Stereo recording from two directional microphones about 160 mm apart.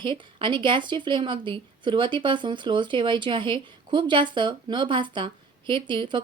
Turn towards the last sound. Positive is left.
turn(degrees=-30)  # may be behind; listen again after turning